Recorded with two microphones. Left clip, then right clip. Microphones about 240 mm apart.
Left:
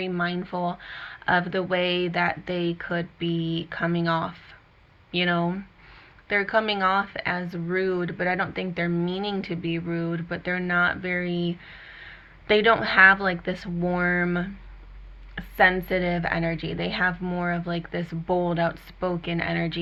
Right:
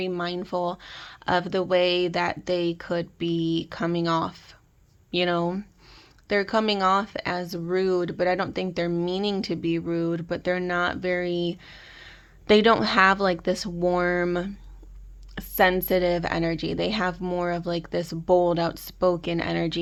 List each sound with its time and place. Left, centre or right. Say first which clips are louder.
0.0 s speech: left 1 dB; right